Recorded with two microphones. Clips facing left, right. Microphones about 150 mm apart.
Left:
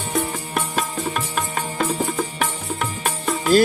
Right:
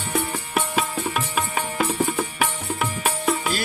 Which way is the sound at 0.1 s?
5° right (ahead or behind).